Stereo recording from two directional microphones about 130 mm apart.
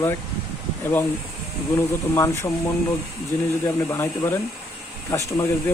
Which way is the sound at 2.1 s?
20° left (ahead or behind).